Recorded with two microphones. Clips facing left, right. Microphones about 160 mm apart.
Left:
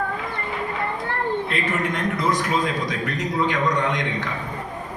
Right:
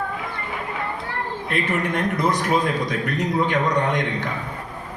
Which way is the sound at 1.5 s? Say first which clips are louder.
Right 1 dB; 60° right (ahead or behind).